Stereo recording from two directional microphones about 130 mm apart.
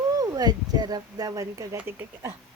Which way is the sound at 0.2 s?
30° right (ahead or behind).